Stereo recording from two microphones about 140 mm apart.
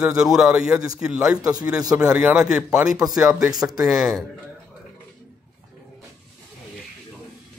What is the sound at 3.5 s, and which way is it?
Speech, 25° right (ahead or behind).